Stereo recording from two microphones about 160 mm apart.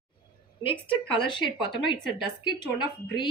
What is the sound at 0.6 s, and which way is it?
Speech, 35° left (ahead or behind).